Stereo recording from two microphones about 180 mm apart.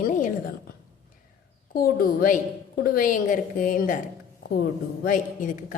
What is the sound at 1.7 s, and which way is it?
A woman's voice, 55° left (ahead or behind).